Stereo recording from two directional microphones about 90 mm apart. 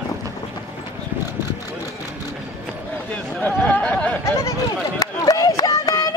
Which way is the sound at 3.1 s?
15° left (ahead or behind).